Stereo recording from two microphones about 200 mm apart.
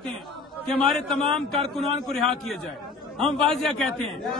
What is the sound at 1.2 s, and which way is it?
A man's voice, centre (ahead or behind).